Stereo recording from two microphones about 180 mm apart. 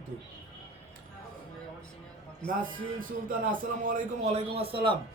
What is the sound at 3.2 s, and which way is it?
A man's voice, 50° right (ahead or behind).